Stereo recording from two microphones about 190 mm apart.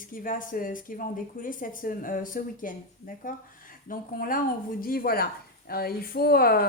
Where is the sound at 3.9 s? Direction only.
45° left (ahead or behind).